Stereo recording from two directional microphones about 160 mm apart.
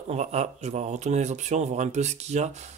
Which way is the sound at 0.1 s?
45° right (ahead or behind).